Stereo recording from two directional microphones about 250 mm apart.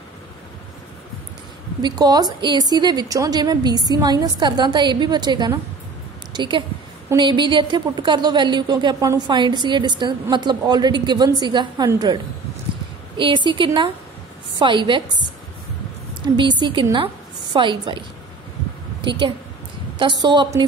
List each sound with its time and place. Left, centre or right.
1.8 s a woman's voice: centre
13.2 s a woman's voice: centre